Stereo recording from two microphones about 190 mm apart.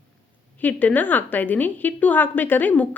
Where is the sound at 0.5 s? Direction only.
10° left (ahead or behind).